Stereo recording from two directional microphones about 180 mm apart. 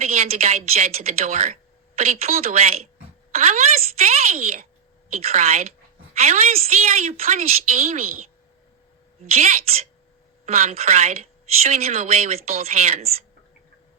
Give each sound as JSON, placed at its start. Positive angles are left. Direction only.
{"t": 0.0, "sound": "a woman's voice", "side_deg": -35}
{"t": 9.3, "sound": "a woman's voice", "side_deg": -35}